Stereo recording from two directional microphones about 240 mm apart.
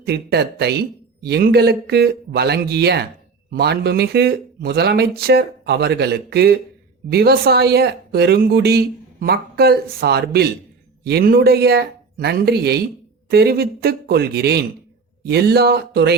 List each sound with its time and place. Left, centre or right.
0.0 s a man's voice: right